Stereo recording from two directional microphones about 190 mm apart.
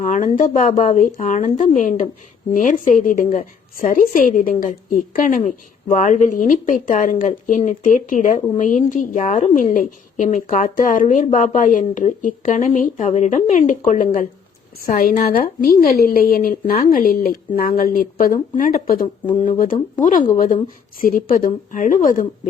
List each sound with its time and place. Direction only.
0.0 s a woman's voice: 40° left (ahead or behind)